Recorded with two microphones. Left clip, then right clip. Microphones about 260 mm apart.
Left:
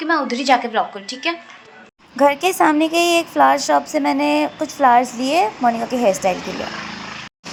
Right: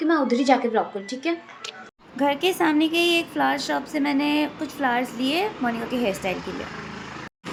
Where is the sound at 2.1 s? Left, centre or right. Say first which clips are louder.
Left 7 dB; centre.